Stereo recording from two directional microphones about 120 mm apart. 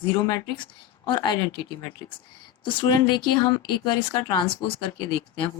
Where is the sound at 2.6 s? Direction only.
35° left (ahead or behind).